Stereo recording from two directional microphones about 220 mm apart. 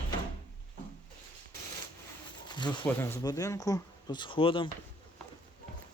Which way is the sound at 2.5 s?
20° left (ahead or behind).